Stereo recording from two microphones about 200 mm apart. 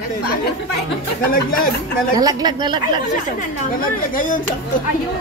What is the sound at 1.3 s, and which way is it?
Speech, 45° left (ahead or behind).